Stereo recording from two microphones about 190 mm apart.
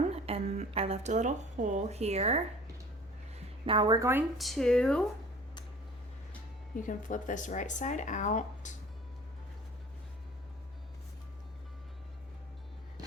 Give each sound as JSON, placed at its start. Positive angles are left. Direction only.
{"t": 0.1, "sound": "a sound", "side_deg": -30}
{"t": 3.3, "sound": "a woman's voice", "side_deg": -25}
{"t": 4.4, "sound": "speech", "side_deg": 0}
{"t": 6.8, "sound": "speech", "side_deg": 45}